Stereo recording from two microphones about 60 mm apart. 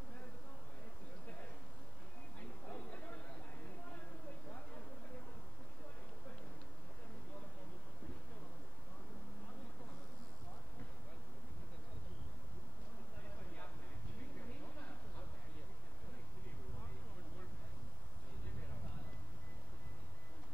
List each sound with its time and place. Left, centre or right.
2.7 s chatter: left